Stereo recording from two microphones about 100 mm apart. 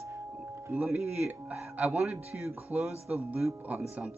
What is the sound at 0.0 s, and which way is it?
Music, 30° right (ahead or behind).